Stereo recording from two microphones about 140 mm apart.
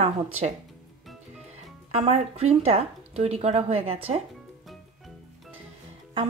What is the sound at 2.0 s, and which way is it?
Speech, 45° right (ahead or behind).